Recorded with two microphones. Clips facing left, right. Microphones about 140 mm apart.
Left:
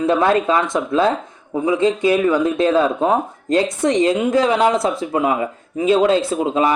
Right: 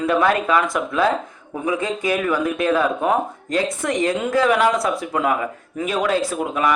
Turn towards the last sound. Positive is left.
turn(degrees=25)  # may be behind; listen again after turning